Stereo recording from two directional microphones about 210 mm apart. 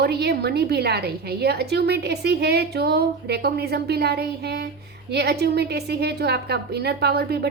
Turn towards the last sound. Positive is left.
turn(degrees=-50)  # may be behind; listen again after turning